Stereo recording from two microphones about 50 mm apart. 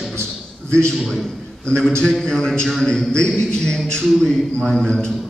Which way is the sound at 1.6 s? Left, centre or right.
Centre.